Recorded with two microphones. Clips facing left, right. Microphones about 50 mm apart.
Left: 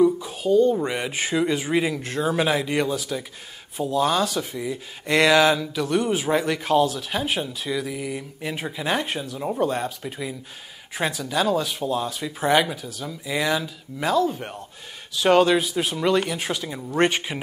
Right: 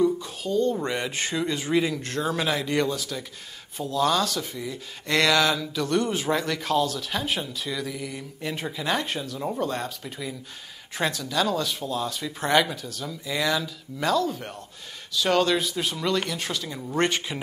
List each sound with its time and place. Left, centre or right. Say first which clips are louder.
0.0 s speech: left 4 dB; centre